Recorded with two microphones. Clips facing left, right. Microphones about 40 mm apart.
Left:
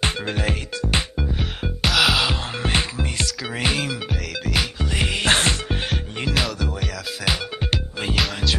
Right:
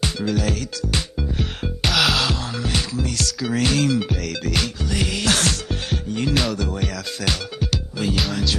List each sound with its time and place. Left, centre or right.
0.0 s music: left
1.3 s music: centre
2.6 s music: left; by 4.6 s centre
4.8 s music: left
6.2 s music: centre
7.7 s music: left